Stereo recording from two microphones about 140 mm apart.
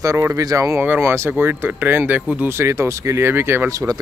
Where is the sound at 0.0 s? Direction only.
20° right (ahead or behind).